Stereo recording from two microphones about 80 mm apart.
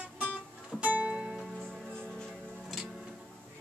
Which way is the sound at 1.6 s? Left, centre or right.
Centre.